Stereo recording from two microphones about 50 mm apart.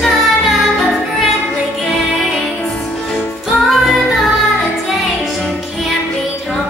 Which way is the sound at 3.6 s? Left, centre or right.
Centre.